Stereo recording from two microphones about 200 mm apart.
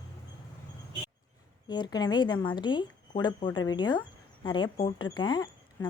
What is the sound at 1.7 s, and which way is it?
Speech, 20° left (ahead or behind).